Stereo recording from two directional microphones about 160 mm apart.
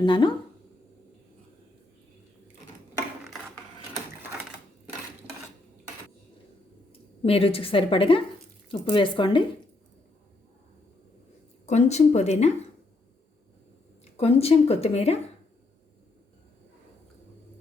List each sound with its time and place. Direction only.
0.0 s speech: 30° left (ahead or behind)
7.3 s a woman's voice: 35° left (ahead or behind)
11.6 s speech: 45° left (ahead or behind)
14.0 s a woman's voice: 40° left (ahead or behind)